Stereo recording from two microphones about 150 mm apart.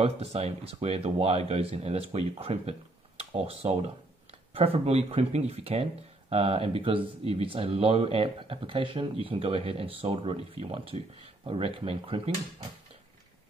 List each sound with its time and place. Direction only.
0.0 s speech: 45° right (ahead or behind)